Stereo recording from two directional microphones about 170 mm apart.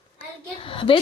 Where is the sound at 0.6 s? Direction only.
30° left (ahead or behind).